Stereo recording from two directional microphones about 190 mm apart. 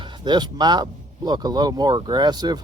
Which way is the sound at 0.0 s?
20° right (ahead or behind).